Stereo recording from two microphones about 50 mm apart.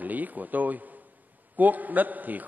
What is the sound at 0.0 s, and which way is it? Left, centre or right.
A man's voice, right.